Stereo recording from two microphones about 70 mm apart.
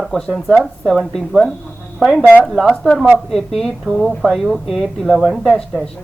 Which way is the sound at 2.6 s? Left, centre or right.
Centre.